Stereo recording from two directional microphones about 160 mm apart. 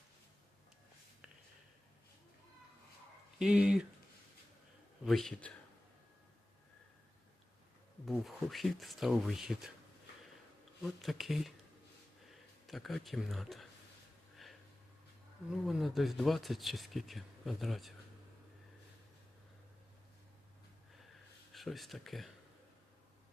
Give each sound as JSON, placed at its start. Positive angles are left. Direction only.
{"t": 3.3, "sound": "speech", "side_deg": -5}
{"t": 5.0, "sound": "speech", "side_deg": 0}
{"t": 8.1, "sound": "speech", "side_deg": 0}
{"t": 10.8, "sound": "speech", "side_deg": 0}
{"t": 12.6, "sound": "speech", "side_deg": 0}
{"t": 15.6, "sound": "speech", "side_deg": 0}
{"t": 21.5, "sound": "speech", "side_deg": 0}